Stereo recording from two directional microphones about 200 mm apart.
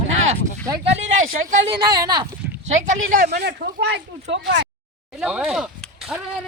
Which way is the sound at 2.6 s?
40° right (ahead or behind).